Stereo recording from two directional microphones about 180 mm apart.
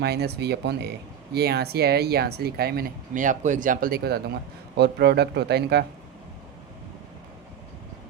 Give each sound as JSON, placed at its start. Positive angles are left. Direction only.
{"t": 0.0, "sound": "speech", "side_deg": -65}